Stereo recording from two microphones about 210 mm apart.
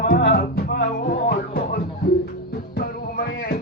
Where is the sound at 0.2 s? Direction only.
50° left (ahead or behind).